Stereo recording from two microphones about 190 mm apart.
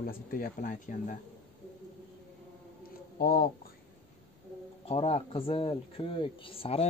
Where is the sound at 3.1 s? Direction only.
55° left (ahead or behind).